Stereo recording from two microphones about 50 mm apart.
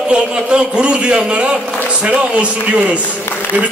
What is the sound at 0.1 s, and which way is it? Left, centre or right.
A man's voice, right.